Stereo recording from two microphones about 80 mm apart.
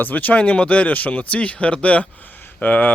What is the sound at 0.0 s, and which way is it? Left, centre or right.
Speech, left.